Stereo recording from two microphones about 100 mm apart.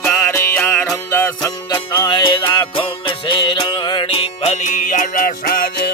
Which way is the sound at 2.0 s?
50° left (ahead or behind).